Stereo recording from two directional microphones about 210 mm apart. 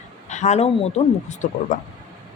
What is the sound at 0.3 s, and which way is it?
Speech, 35° left (ahead or behind).